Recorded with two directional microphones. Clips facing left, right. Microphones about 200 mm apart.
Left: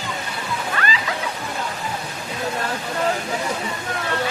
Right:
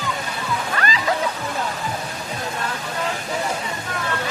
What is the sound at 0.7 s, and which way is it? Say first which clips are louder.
Music: even; 40° right (ahead or behind).